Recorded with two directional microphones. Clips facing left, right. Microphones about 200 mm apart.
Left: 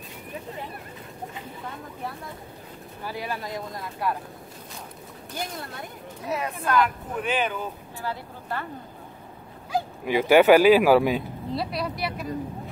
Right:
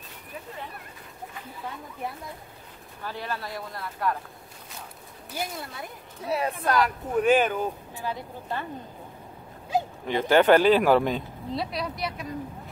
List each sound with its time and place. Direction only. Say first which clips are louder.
3.0 s speech: left 1 dB; 10° left (ahead or behind)
5.3 s speech: even; 5° right (ahead or behind)
6.2 s speech: right 2 dB; 30° right (ahead or behind)
8.0 s speech: even; 20° right (ahead or behind)
10.0 s speech: left 3 dB; 10° left (ahead or behind)